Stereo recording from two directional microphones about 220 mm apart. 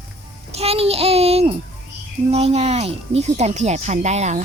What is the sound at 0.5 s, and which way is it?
A child's voice, 25° right (ahead or behind).